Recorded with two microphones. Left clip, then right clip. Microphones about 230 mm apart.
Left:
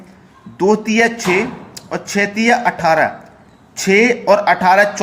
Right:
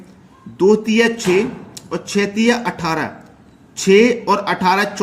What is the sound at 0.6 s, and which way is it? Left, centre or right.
A man's voice, centre.